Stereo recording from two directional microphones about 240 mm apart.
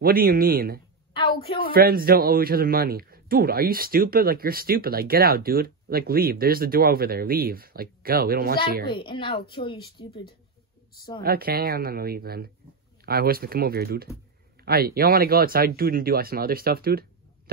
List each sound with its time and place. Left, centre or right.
0.0 s a man's voice: right
1.1 s a woman's voice: left
1.7 s a man's voice: right
8.8 s a child's voice: centre
11.2 s a man's voice: right